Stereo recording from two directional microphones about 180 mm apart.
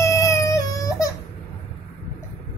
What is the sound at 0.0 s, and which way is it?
Baby cry, 15° left (ahead or behind).